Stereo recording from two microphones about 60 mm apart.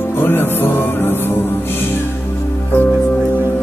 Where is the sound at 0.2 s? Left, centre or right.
Left.